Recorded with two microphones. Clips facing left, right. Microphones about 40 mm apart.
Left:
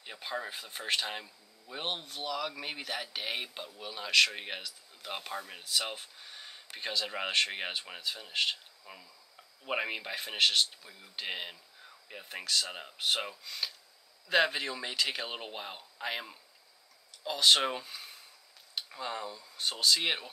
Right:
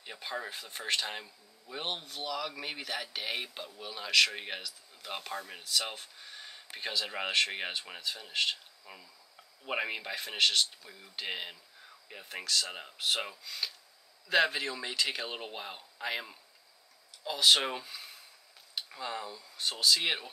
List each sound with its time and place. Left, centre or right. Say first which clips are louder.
0.0 s speech: left 1 dB; centre